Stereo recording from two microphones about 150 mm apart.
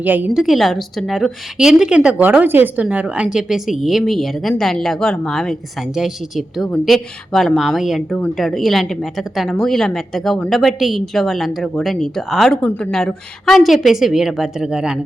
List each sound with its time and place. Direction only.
0.0 s a woman's voice: 10° right (ahead or behind)
0.4 s a woman's voice: centre (ahead or behind)